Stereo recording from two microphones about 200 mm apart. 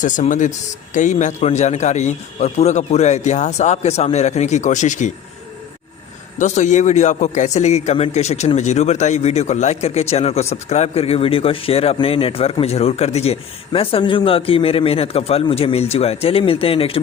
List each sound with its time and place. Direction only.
0.0 s speech: 40° left (ahead or behind)
6.4 s speech: 35° left (ahead or behind)